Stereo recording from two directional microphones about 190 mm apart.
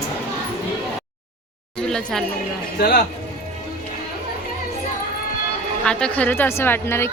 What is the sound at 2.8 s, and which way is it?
Speech, 55° left (ahead or behind).